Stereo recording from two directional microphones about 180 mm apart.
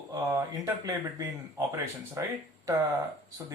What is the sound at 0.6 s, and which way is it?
Speech, 20° right (ahead or behind).